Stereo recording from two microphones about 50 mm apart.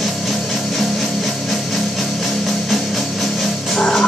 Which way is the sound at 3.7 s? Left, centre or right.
Centre.